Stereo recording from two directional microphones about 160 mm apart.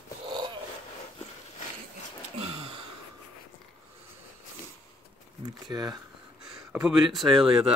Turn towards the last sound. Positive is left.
turn(degrees=0)  # may be behind; listen again after turning